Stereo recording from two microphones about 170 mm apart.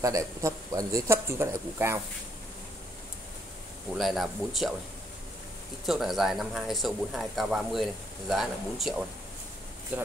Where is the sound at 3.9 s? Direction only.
Centre (ahead or behind).